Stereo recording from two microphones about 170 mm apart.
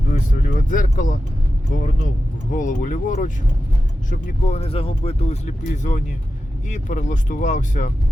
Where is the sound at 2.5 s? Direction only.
50° left (ahead or behind).